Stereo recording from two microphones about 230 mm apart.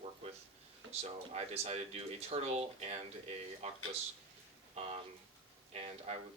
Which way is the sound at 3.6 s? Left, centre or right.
Right.